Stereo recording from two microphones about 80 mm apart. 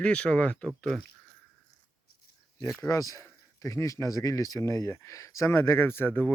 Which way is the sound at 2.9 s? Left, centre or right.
Left.